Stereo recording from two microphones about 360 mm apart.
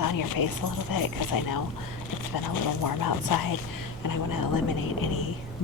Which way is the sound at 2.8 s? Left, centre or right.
Left.